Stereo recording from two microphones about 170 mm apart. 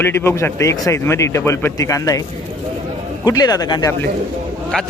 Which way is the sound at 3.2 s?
20° left (ahead or behind).